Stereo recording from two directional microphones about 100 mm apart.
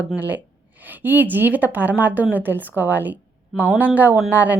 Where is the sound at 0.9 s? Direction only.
20° right (ahead or behind).